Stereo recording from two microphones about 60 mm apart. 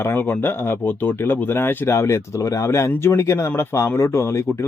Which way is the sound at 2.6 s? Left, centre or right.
Left.